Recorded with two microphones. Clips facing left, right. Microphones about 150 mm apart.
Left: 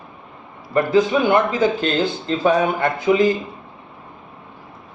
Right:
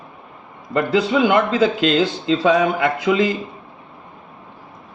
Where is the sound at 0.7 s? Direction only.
90° right.